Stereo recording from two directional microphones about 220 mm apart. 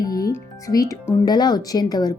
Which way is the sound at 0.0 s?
15° left (ahead or behind).